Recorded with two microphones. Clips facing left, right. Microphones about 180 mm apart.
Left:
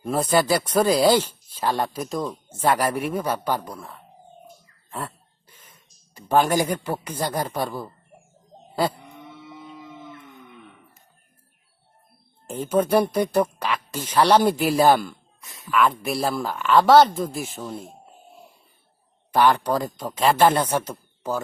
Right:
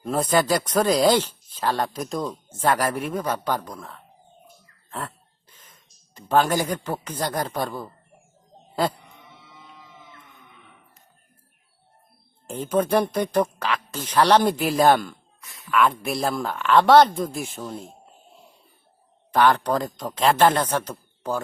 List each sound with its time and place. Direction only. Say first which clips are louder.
0.0 s speech: left 1 dB; 5° left (ahead or behind)
4.9 s dog: left 1 dB; 10° left (ahead or behind)
6.1 s speech: left 1 dB; 10° left (ahead or behind)
8.7 s a sound: even; 10° left (ahead or behind)
12.5 s speech: left 1 dB; 5° left (ahead or behind)
15.4 s a sound: left 3 dB; 20° left (ahead or behind)
15.7 s speech: even; centre (ahead or behind)
19.3 s speech: even; 10° left (ahead or behind)